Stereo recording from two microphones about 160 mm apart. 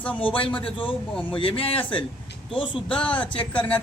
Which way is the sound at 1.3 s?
35° left (ahead or behind).